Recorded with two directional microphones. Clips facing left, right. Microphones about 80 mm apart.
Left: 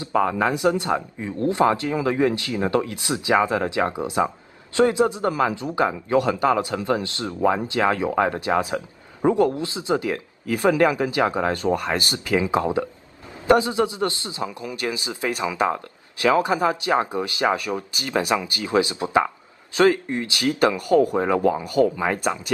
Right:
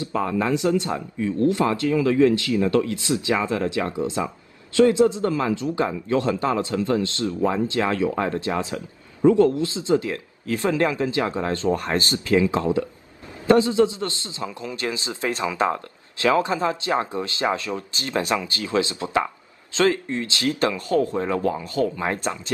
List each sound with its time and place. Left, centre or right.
0.0 s a man's voice: left
11.7 s speech: centre
12.1 s a man's voice: centre